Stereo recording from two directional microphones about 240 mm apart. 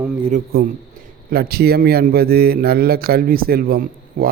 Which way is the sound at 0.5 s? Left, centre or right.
Right.